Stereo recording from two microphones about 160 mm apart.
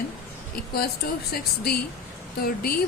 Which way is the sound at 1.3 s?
75° left (ahead or behind).